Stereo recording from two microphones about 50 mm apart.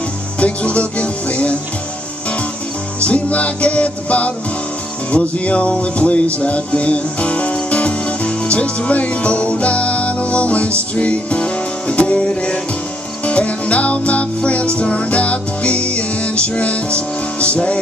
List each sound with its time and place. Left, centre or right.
0.4 s music: left
3.0 s music: left